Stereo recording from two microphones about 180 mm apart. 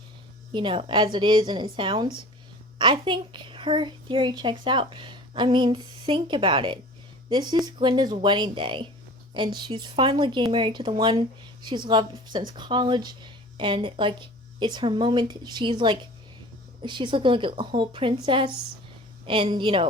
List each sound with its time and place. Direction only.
0.5 s a woman's voice: 30° right (ahead or behind)